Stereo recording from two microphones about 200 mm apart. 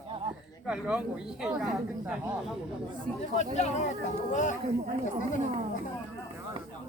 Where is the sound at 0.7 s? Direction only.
5° right (ahead or behind).